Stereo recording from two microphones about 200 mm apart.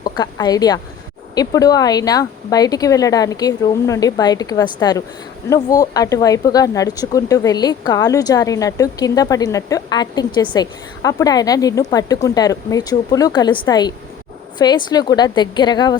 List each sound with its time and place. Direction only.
0.0 s a woman's voice: 20° left (ahead or behind)